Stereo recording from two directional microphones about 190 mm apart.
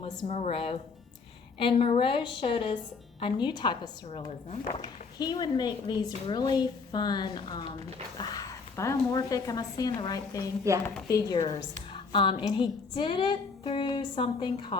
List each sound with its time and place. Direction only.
0.3 s speech: 35° left (ahead or behind)
7.6 s speech: 35° right (ahead or behind)
8.2 s speech: 20° left (ahead or behind)